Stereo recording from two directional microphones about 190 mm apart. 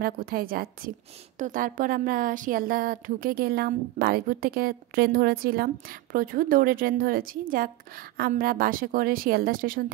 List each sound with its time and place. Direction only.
0.0 s speech: 50° right (ahead or behind)